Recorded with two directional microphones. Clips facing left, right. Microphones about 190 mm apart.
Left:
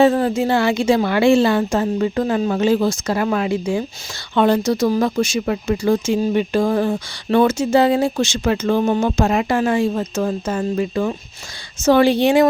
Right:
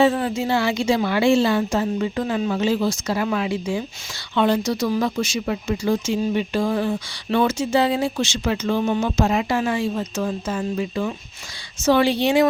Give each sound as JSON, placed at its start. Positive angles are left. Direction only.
{"t": 0.0, "sound": "speech", "side_deg": 45}